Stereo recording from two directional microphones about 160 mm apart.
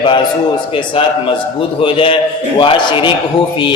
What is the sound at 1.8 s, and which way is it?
A man's voice, 35° left (ahead or behind).